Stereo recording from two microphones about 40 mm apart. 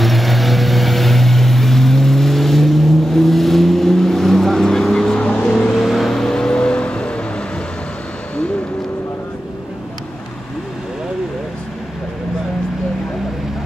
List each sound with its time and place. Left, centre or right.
0.0 s vehicle: centre
6.1 s vehicle: centre